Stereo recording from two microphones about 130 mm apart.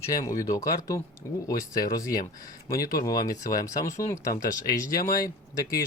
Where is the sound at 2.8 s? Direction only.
25° left (ahead or behind).